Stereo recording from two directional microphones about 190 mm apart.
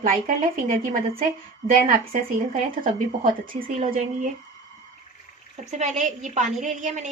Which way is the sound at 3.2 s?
45° right (ahead or behind).